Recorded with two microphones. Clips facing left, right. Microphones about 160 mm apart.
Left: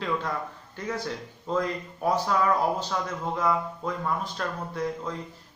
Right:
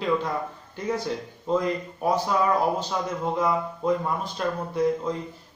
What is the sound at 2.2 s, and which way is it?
Speech, 20° right (ahead or behind).